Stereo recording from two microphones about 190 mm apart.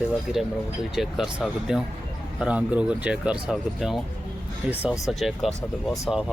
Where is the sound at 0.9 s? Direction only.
Centre (ahead or behind).